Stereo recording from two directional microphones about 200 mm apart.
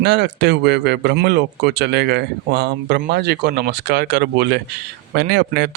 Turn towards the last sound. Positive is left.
turn(degrees=-55)  # may be behind; listen again after turning